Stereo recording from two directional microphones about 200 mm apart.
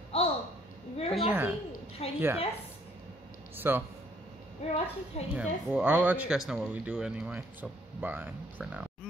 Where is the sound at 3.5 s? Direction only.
10° right (ahead or behind).